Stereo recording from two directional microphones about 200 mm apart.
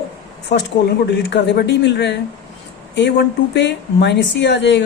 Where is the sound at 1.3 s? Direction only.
60° left (ahead or behind).